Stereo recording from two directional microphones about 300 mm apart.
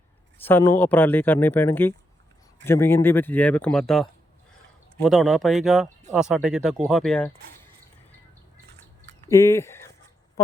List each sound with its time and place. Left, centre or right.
0.3 s a man's voice: centre
9.2 s speech: centre
10.4 s a sound: centre